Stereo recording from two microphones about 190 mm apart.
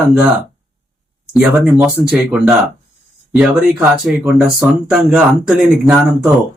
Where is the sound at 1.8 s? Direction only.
10° right (ahead or behind).